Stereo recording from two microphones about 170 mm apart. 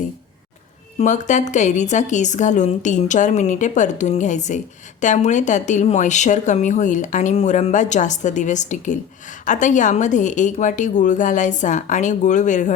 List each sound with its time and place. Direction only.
0.9 s a woman's voice: 45° left (ahead or behind)